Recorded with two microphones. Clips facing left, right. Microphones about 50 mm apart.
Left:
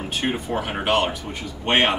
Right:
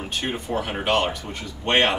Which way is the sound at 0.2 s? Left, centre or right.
Centre.